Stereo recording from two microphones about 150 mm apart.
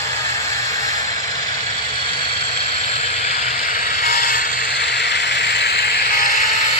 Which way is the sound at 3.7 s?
75° left (ahead or behind).